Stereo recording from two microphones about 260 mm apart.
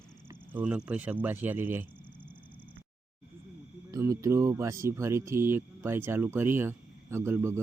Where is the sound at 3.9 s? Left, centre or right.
Centre.